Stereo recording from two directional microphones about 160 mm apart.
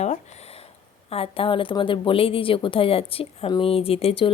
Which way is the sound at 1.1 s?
35° left (ahead or behind).